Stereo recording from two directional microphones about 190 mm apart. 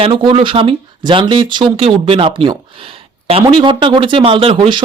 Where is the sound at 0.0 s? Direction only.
25° right (ahead or behind).